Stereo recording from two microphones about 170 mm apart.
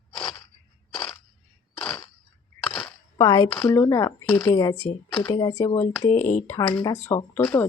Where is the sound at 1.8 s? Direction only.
5° left (ahead or behind).